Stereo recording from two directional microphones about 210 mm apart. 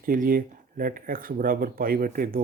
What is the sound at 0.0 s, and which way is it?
Speech, 40° right (ahead or behind).